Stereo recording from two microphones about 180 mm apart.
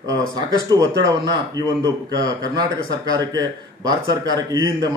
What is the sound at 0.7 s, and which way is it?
Speech, 20° right (ahead or behind).